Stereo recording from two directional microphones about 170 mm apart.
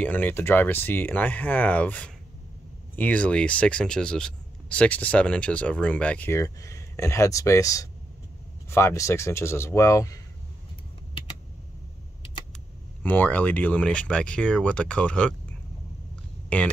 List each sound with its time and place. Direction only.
0.0 s speech: 10° left (ahead or behind)
13.0 s speech: 10° left (ahead or behind)
16.4 s speech: 10° left (ahead or behind)